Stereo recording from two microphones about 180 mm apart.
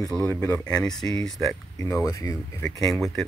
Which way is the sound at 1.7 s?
15° left (ahead or behind).